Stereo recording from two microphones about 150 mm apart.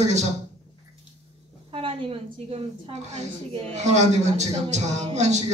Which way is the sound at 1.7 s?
35° right (ahead or behind).